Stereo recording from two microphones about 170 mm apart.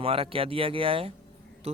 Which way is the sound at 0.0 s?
30° right (ahead or behind).